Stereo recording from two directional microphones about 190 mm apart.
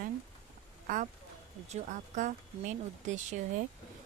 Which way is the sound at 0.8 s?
45° right (ahead or behind).